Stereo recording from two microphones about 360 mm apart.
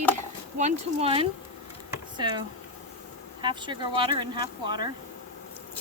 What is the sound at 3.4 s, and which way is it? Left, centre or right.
Speech, centre.